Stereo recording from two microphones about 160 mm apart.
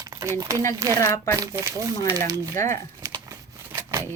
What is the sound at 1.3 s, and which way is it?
Speech, 20° right (ahead or behind).